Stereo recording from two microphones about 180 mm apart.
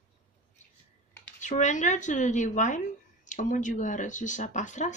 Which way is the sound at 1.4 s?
40° left (ahead or behind).